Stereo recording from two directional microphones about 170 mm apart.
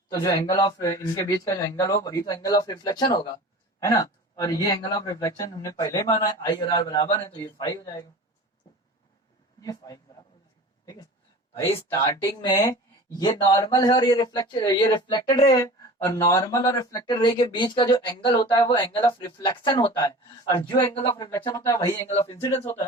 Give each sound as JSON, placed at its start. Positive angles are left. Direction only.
{"t": 0.1, "sound": "speech", "side_deg": 20}
{"t": 9.6, "sound": "speech", "side_deg": 20}
{"t": 12.0, "sound": "speech", "side_deg": 25}